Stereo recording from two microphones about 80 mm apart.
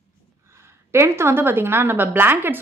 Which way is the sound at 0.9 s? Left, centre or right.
Right.